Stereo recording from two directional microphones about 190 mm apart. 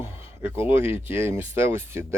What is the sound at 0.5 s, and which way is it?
Speech, 30° left (ahead or behind).